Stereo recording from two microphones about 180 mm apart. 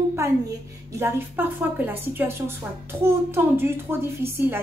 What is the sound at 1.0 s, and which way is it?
A woman's voice, 10° right (ahead or behind).